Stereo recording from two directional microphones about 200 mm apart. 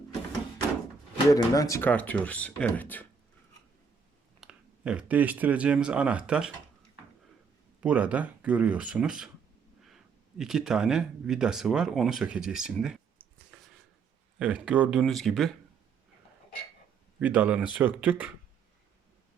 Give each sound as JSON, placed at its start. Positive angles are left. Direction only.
{"t": 1.3, "sound": "speech", "side_deg": 20}
{"t": 4.4, "sound": "speech", "side_deg": -5}
{"t": 7.8, "sound": "speech", "side_deg": -5}
{"t": 14.3, "sound": "speech", "side_deg": -5}
{"t": 17.2, "sound": "speech", "side_deg": -10}